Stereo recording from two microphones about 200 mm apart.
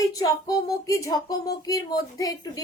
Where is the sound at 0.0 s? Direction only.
15° left (ahead or behind).